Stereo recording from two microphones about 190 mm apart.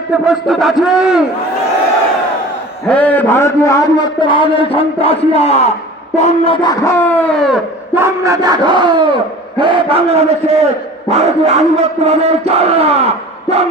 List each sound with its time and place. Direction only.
0.3 s a man's voice: centre (ahead or behind)
2.8 s a man's voice: 5° left (ahead or behind)
7.9 s battle cry: 15° right (ahead or behind)
9.6 s speech: 25° right (ahead or behind)